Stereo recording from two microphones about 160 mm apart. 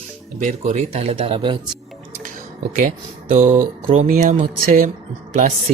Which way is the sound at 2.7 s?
55° right (ahead or behind).